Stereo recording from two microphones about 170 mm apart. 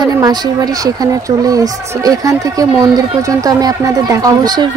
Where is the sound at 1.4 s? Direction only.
20° right (ahead or behind).